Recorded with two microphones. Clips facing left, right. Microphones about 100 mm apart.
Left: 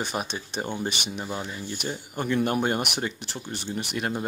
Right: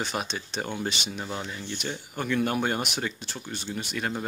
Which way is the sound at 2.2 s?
35° left (ahead or behind).